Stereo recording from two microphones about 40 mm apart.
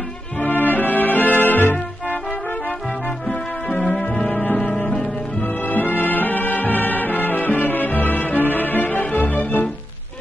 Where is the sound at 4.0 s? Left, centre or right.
Left.